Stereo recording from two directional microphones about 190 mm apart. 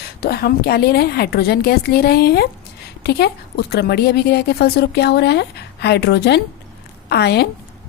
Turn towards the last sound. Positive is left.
turn(degrees=60)  # may be behind; listen again after turning